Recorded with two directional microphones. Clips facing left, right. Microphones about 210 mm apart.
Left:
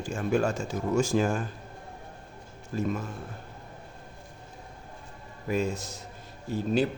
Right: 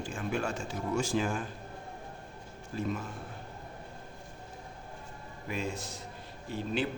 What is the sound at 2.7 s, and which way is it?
Speech, 45° left (ahead or behind).